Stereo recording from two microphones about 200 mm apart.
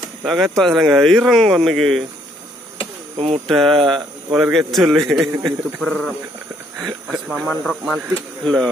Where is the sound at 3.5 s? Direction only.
Centre (ahead or behind).